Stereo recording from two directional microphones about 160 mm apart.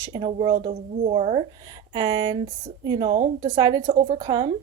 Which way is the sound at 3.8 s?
45° right (ahead or behind).